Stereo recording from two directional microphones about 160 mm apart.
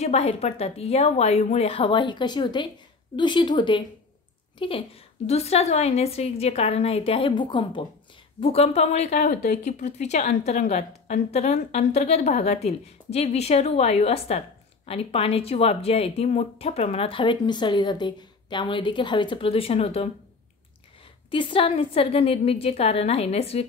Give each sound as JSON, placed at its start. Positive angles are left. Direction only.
{"t": 0.0, "sound": "a woman's voice", "side_deg": 40}
{"t": 21.3, "sound": "speech", "side_deg": 30}